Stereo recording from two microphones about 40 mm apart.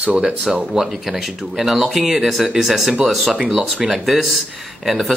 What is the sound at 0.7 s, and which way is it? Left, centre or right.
Speech, centre.